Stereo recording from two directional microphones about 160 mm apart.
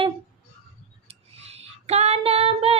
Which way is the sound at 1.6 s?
40° right (ahead or behind).